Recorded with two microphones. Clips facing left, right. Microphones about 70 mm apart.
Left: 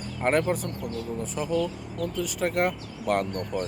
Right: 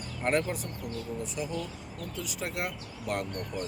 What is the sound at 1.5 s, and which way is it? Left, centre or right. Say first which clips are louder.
Speech: left 9 dB; left.